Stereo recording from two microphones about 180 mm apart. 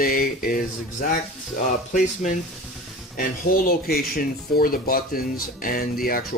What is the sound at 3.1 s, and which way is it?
Speech, 50° left (ahead or behind).